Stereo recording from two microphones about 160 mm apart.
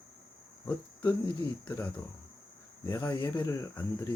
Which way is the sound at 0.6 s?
20° left (ahead or behind).